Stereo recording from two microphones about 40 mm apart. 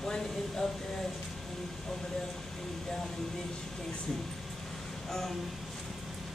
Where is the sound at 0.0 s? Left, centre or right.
Centre.